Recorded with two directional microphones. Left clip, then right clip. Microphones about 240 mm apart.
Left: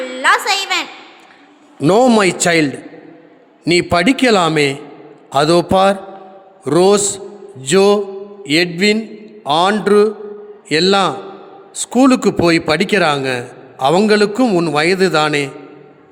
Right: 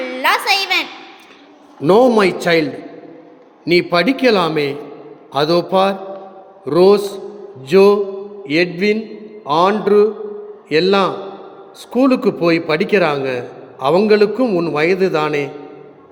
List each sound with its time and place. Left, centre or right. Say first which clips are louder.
0.0 s a sound: left 2 dB; centre
1.8 s a man's voice: even; left
8.8 s mantra: left 2 dB; left
10.7 s a man's voice: left 1 dB; left